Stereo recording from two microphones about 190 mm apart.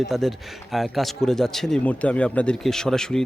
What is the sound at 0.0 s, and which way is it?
Speech, centre (ahead or behind).